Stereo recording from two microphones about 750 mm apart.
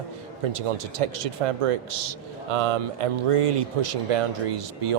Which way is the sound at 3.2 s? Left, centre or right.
Right.